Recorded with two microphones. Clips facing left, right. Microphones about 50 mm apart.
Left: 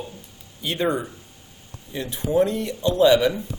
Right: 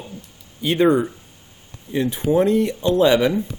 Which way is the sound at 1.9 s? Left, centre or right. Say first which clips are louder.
Right 3 dB; right.